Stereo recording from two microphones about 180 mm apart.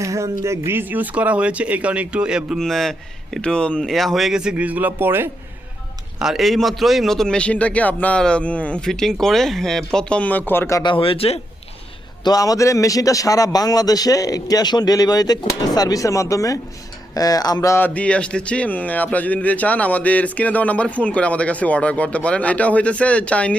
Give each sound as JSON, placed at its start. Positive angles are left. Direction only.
{"t": 0.0, "sound": "a sound", "side_deg": -15}
{"t": 0.4, "sound": "a man's voice", "side_deg": -15}
{"t": 6.1, "sound": "a man's voice", "side_deg": 0}
{"t": 10.9, "sound": "speech", "side_deg": 30}
{"t": 12.2, "sound": "a man's voice", "side_deg": 20}